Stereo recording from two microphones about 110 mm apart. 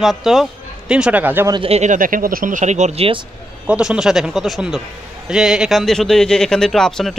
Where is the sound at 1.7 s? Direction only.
70° right (ahead or behind).